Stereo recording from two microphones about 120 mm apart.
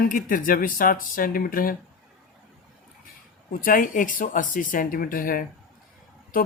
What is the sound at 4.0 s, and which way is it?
Speech, 90° left.